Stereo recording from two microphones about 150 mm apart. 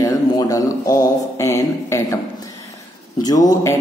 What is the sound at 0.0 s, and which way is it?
Speech, 20° left (ahead or behind).